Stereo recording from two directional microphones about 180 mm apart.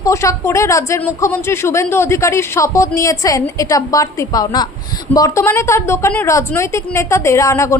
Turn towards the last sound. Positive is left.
turn(degrees=15)  # may be behind; listen again after turning